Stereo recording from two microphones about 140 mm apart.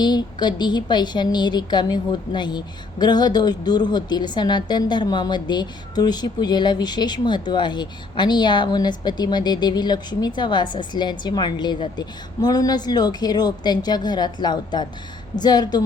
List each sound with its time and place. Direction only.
0.0 s a woman's voice: 30° left (ahead or behind)